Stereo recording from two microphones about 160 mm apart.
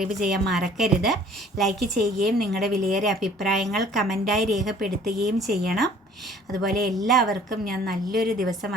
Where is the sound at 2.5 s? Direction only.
Centre (ahead or behind).